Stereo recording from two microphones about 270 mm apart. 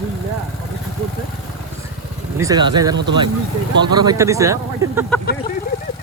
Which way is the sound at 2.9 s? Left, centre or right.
Right.